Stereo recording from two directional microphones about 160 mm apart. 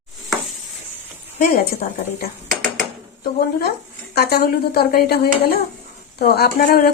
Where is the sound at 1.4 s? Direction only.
70° left (ahead or behind).